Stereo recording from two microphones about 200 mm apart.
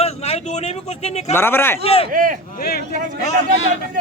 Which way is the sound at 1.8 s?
30° left (ahead or behind).